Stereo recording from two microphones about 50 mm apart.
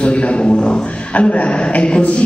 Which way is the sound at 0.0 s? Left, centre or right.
Left.